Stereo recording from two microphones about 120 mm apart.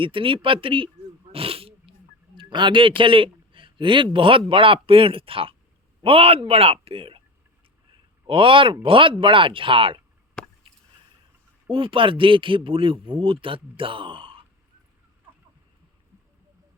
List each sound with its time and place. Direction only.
0.0 s speech: 45° right (ahead or behind)
1.3 s wild animals: 50° right (ahead or behind)
3.0 s speech: 45° right (ahead or behind)
8.3 s speech: 45° right (ahead or behind)
10.4 s a sound: 5° left (ahead or behind)
11.7 s speech: 45° right (ahead or behind)